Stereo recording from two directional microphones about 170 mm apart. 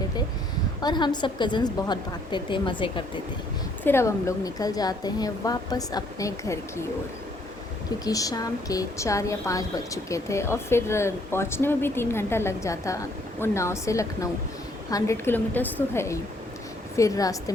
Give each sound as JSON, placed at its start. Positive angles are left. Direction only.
{"t": 0.8, "sound": "a woman's voice", "side_deg": 25}
{"t": 3.8, "sound": "a woman's voice", "side_deg": 15}
{"t": 8.0, "sound": "a woman's voice", "side_deg": 20}